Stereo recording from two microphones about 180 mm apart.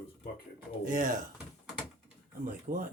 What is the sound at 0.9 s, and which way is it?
Speech, 50° right (ahead or behind).